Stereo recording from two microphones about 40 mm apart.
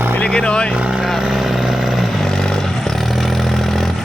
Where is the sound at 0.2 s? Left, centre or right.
Left.